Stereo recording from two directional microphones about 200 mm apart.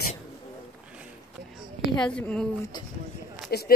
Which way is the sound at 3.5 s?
50° left (ahead or behind).